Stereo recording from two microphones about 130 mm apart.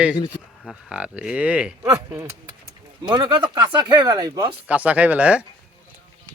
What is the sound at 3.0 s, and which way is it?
Speech, 35° right (ahead or behind).